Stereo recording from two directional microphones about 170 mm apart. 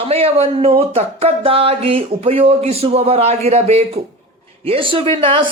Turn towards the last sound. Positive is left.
turn(degrees=-30)  # may be behind; listen again after turning